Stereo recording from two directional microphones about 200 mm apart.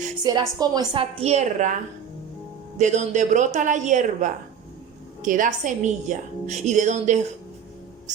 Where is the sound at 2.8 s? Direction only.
35° right (ahead or behind).